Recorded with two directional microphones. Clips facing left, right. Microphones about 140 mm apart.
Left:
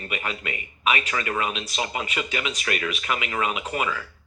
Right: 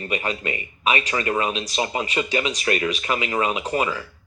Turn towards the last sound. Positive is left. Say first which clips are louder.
# right 4 dB
turn(degrees=-30)  # may be behind; listen again after turning